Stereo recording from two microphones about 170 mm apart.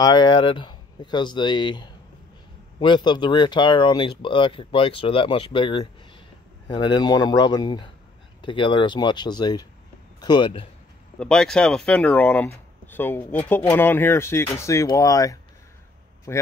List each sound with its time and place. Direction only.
0.0 s speech: 25° left (ahead or behind)
11.1 s speech: 5° left (ahead or behind)